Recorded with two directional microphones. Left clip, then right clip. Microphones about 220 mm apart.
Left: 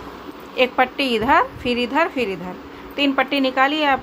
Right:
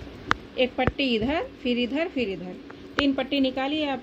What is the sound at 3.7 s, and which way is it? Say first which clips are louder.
Speech: left 9 dB; 5° right (ahead or behind).